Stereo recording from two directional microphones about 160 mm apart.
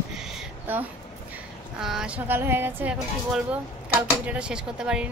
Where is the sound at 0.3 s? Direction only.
10° right (ahead or behind).